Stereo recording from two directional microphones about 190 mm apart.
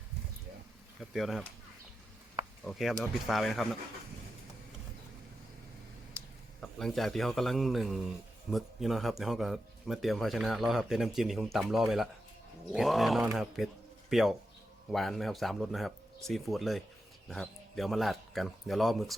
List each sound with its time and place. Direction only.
1.1 s a man's voice: centre (ahead or behind)
2.6 s a man's voice: centre (ahead or behind)
6.6 s a man's voice: centre (ahead or behind)